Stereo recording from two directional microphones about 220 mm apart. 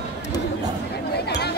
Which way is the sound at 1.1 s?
50° left (ahead or behind).